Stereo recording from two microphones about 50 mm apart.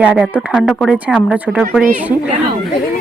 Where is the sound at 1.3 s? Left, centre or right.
Right.